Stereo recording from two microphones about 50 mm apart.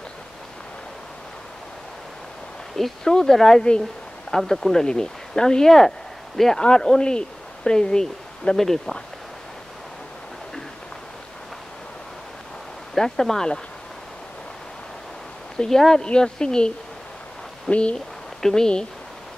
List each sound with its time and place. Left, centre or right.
2.7 s speech: centre
12.9 s speech: centre
15.5 s speech: centre
17.9 s speech: centre